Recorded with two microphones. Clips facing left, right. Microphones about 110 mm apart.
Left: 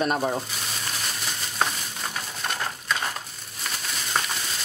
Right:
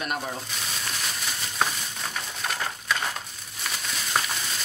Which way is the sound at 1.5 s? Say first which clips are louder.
Left 1 dB; centre (ahead or behind).